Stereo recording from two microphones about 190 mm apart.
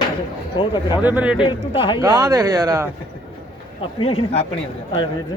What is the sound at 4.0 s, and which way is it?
Speech, 30° left (ahead or behind).